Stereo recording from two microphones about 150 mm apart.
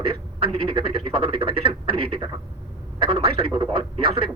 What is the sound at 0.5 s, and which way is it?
Speech, 40° right (ahead or behind).